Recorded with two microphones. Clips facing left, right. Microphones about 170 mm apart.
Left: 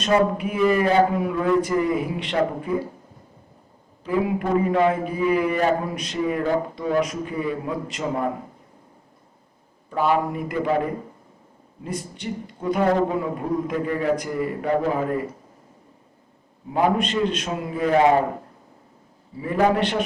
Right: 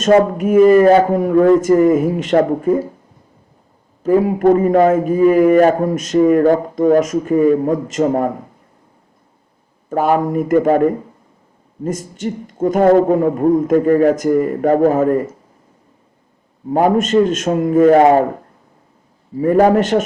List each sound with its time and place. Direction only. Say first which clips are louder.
0.0 s a man's voice: right 8 dB; 45° right (ahead or behind)
4.0 s a man's voice: right 11 dB; 40° right (ahead or behind)
9.9 s a man's voice: right 6 dB; 45° right (ahead or behind)
16.6 s a man's voice: right 7 dB; 45° right (ahead or behind)
19.4 s a man's voice: right 9 dB; 45° right (ahead or behind)